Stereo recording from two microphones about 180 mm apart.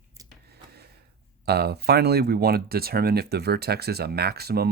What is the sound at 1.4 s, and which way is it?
Speech, 65° right (ahead or behind).